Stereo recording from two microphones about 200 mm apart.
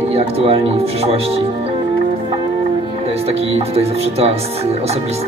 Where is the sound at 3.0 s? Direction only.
30° right (ahead or behind).